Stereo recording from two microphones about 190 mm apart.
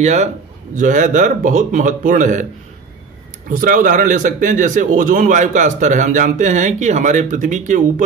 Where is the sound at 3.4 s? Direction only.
45° right (ahead or behind).